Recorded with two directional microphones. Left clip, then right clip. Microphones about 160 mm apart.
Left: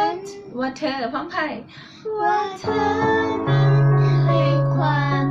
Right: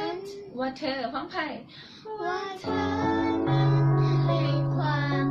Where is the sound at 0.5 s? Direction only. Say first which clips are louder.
Left 6 dB; 40° left (ahead or behind).